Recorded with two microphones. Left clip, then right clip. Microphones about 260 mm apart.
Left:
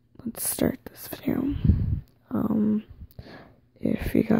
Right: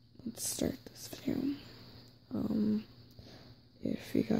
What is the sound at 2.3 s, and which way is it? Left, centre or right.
Dog, centre.